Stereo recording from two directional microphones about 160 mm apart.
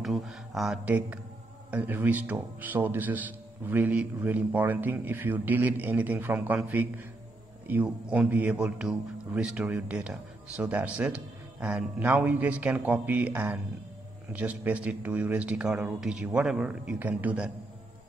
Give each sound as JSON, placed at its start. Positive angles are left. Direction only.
{"t": 0.0, "sound": "a man's voice", "side_deg": 0}